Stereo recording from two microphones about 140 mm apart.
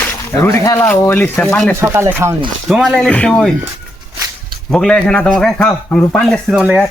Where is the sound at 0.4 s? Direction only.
20° left (ahead or behind); by 1.7 s 5° left (ahead or behind).